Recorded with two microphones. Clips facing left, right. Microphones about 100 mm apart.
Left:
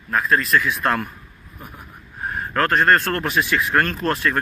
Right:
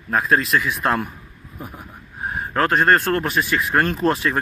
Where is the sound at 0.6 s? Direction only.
5° right (ahead or behind).